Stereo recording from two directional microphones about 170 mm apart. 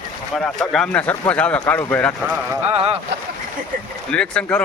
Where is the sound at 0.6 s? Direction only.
5° left (ahead or behind).